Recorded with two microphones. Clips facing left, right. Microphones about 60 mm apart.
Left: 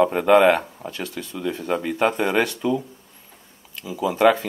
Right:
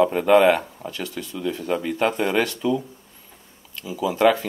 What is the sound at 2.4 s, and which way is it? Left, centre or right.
Speech, left.